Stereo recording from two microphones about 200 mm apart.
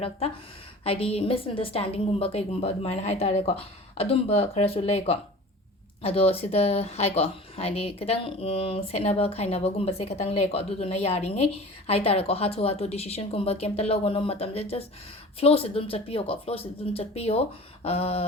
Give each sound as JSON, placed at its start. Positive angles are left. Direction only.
{"t": 0.9, "sound": "a woman's voice", "side_deg": 30}